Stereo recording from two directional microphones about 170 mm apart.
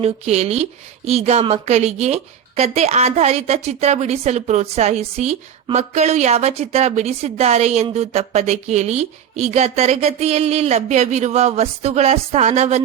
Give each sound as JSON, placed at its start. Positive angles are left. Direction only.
{"t": 0.0, "sound": "speech", "side_deg": -40}